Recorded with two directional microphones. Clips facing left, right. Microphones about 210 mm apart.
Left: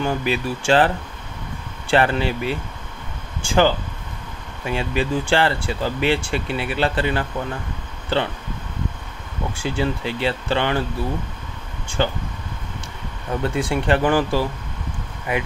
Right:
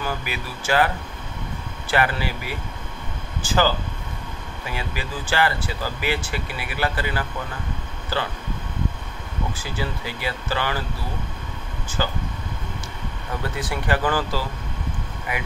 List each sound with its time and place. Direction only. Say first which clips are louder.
0.0 s speech: left 7 dB; 25° left (ahead or behind)
9.6 s speech: left 6 dB; 25° left (ahead or behind)
12.0 s speech: left 5 dB; 25° left (ahead or behind)
13.4 s speech: left 7 dB; 25° left (ahead or behind)